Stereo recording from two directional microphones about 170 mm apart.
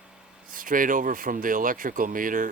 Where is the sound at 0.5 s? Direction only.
55° right (ahead or behind).